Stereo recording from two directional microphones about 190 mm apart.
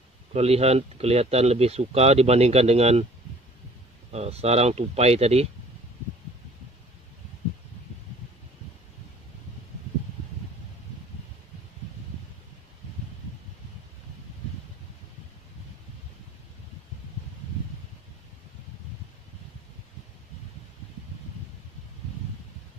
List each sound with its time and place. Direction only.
0.3 s speech: 35° right (ahead or behind)
4.1 s speech: 35° right (ahead or behind)